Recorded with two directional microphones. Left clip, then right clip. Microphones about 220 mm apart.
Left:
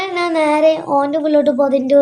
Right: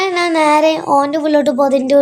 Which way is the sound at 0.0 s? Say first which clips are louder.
Right 3 dB; 35° right (ahead or behind).